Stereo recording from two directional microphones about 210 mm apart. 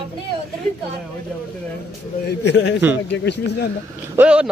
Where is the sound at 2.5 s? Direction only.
55° left (ahead or behind).